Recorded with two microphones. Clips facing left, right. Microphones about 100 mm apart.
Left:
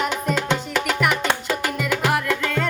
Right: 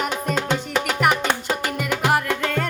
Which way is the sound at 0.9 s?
40° right (ahead or behind).